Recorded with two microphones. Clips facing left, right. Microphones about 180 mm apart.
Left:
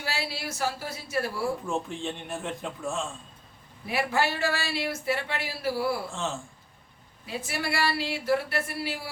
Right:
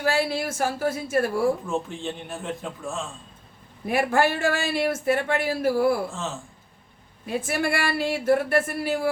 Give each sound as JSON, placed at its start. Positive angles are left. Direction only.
{"t": 0.0, "sound": "a man's voice", "side_deg": -50}
{"t": 1.6, "sound": "a man's voice", "side_deg": 0}
{"t": 3.8, "sound": "a man's voice", "side_deg": -50}
{"t": 6.1, "sound": "a man's voice", "side_deg": 0}
{"t": 7.3, "sound": "a man's voice", "side_deg": -50}